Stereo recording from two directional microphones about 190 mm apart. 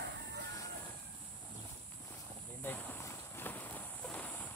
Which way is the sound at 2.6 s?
15° left (ahead or behind).